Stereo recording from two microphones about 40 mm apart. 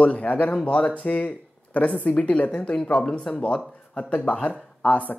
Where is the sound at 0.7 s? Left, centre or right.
Left.